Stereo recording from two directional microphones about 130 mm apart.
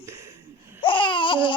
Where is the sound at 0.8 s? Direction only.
40° left (ahead or behind).